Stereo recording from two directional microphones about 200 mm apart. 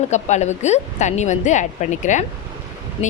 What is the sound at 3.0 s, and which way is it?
Speech, 25° left (ahead or behind).